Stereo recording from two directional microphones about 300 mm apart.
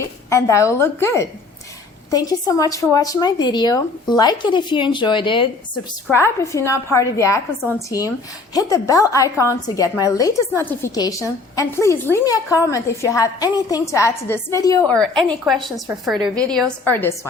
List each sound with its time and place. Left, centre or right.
0.0 s a woman's voice: centre